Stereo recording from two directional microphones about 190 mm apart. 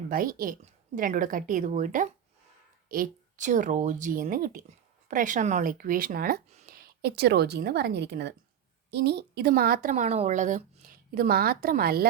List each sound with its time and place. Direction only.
0.1 s a woman's voice: 50° right (ahead or behind)
9.9 s a woman's voice: 35° right (ahead or behind); by 12.0 s 55° right (ahead or behind)